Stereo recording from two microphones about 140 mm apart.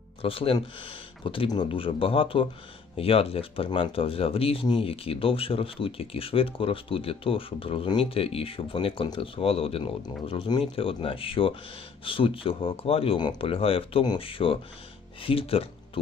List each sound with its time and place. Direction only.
0.2 s speech: 40° left (ahead or behind)